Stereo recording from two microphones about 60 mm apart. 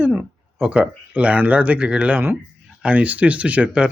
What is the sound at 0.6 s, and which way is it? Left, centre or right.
Speech, centre.